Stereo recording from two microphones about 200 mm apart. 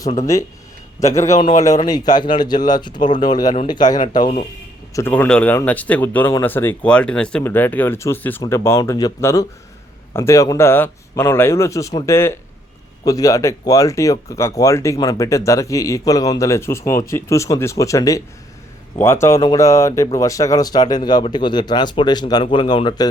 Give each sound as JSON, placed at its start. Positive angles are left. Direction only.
{"t": 0.9, "sound": "speech", "side_deg": 15}
{"t": 4.9, "sound": "speech", "side_deg": 10}